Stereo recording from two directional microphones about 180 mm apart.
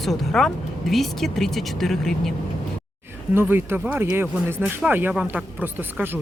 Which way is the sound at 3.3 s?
15° right (ahead or behind).